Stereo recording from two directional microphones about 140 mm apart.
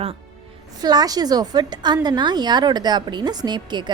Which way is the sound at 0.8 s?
30° right (ahead or behind).